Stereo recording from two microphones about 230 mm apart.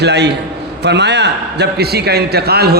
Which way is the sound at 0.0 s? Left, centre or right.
Right.